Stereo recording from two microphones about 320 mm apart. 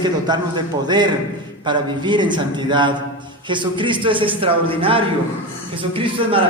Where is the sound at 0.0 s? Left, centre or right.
Centre.